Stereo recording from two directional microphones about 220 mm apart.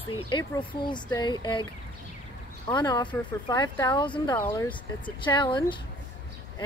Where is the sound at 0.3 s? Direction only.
20° left (ahead or behind).